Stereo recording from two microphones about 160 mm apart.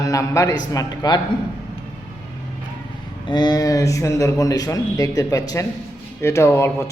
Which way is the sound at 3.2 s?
25° left (ahead or behind).